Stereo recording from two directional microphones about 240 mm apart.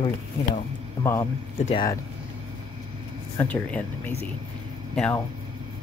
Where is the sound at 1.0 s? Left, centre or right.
Centre.